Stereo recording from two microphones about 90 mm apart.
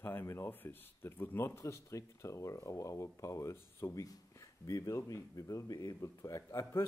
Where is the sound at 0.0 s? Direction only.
25° left (ahead or behind).